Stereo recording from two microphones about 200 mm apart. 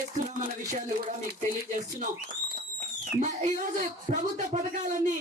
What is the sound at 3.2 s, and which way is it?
A woman's voice, 40° right (ahead or behind).